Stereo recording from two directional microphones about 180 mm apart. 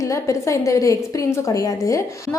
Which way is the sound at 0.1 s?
15° left (ahead or behind).